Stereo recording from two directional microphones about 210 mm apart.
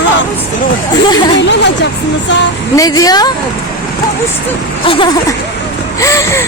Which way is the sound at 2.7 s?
15° left (ahead or behind).